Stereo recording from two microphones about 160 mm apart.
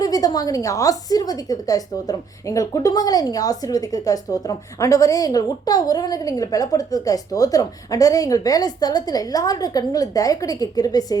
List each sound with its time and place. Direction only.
0.0 s a woman's voice: 25° left (ahead or behind)